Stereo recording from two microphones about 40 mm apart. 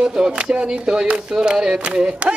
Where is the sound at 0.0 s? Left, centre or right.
Right.